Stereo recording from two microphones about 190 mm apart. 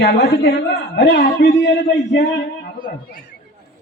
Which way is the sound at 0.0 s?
60° left (ahead or behind).